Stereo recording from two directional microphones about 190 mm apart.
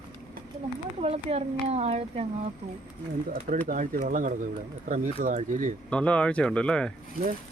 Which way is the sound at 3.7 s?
45° right (ahead or behind).